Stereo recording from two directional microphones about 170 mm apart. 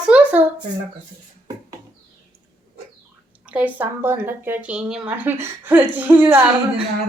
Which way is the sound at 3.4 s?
10° right (ahead or behind).